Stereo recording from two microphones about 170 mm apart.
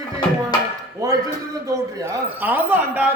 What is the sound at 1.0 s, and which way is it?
Speech, 20° right (ahead or behind).